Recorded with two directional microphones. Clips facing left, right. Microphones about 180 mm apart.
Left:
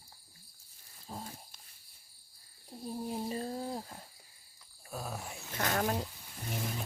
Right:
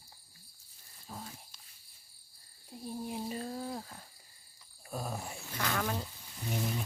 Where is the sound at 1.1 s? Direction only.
30° left (ahead or behind).